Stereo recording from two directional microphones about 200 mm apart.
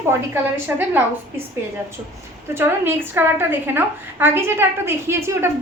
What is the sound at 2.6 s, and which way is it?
A woman's voice, 10° right (ahead or behind).